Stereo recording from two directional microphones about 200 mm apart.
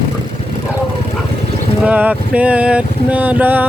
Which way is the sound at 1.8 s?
10° right (ahead or behind).